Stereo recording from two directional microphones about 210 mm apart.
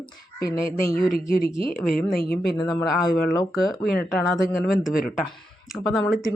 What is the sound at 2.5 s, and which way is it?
Speech, 20° left (ahead or behind).